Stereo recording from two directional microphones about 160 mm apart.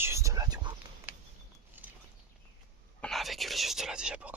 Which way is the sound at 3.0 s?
Centre (ahead or behind).